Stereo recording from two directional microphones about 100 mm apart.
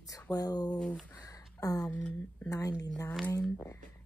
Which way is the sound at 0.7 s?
10° left (ahead or behind).